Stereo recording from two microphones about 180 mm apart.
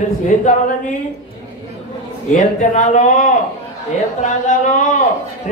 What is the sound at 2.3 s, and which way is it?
A man's voice, 45° left (ahead or behind).